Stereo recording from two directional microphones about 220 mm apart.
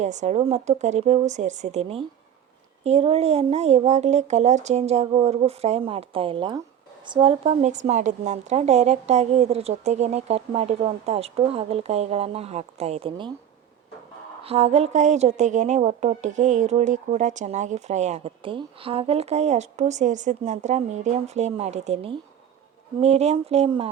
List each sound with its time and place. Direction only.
0.0 s a woman's voice: 30° right (ahead or behind)
14.4 s a woman's voice: 25° right (ahead or behind)